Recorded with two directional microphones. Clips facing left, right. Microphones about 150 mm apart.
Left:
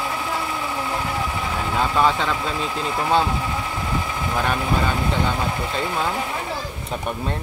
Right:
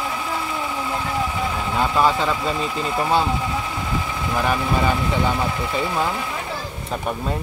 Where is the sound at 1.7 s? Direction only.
Centre (ahead or behind).